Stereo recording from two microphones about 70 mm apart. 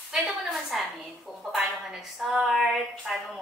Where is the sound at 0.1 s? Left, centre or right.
Centre.